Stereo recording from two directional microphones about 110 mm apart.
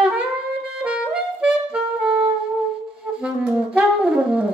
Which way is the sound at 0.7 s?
10° right (ahead or behind).